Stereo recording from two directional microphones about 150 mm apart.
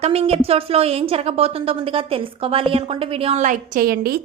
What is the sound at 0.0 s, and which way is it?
A woman's voice, 40° right (ahead or behind).